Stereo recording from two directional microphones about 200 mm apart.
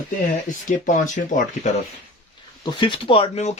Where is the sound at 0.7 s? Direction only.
40° left (ahead or behind).